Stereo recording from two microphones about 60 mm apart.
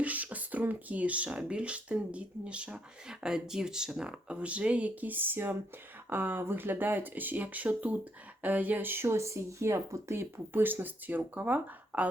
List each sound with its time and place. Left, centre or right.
0.0 s speech: right